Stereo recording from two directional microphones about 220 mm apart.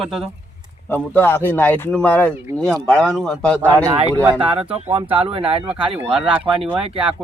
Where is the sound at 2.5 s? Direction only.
10° right (ahead or behind).